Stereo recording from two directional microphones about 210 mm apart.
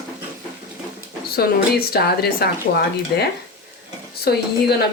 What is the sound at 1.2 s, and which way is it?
Speech, 45° left (ahead or behind).